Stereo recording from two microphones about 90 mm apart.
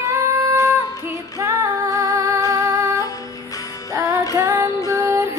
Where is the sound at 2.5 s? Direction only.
30° right (ahead or behind).